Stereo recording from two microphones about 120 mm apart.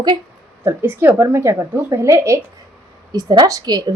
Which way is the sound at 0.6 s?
20° right (ahead or behind).